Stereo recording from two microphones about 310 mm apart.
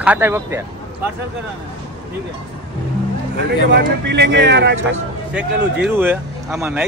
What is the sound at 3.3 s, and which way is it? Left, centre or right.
Speech, right.